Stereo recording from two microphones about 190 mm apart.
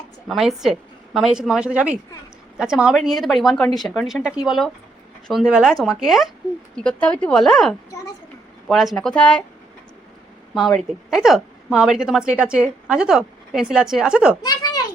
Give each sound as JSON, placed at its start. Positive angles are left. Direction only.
{"t": 0.3, "sound": "a woman's voice", "side_deg": 0}
{"t": 10.5, "sound": "a woman's voice", "side_deg": 0}
{"t": 14.4, "sound": "a sound", "side_deg": 20}